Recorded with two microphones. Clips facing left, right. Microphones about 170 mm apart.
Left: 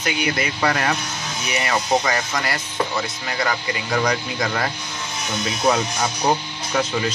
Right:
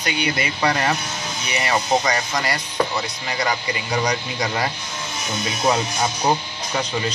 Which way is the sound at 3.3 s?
10° right (ahead or behind).